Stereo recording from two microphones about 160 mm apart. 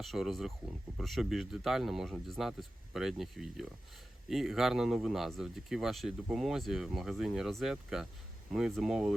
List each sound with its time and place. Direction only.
0.0 s speech: centre (ahead or behind)